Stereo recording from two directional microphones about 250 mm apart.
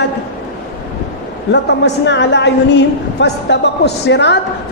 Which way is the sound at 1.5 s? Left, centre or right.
Left.